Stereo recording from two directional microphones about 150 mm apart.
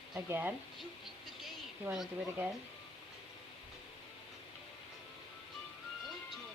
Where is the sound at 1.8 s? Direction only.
5° right (ahead or behind).